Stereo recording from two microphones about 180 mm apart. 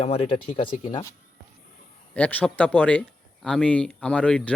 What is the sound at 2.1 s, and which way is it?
A man's voice, 5° left (ahead or behind).